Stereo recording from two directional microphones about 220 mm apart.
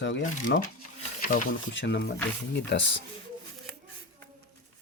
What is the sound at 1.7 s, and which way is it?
Speech, 50° left (ahead or behind).